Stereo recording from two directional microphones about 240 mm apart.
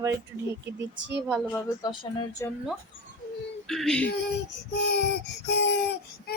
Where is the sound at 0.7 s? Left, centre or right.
Right.